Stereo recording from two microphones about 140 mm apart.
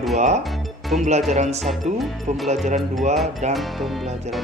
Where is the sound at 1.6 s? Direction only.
Centre (ahead or behind).